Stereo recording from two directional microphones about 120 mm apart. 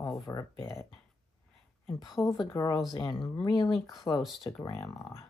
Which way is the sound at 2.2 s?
20° left (ahead or behind).